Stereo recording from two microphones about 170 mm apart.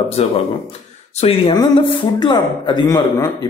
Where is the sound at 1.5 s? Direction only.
25° left (ahead or behind).